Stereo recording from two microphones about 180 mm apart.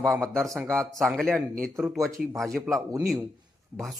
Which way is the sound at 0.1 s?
15° right (ahead or behind).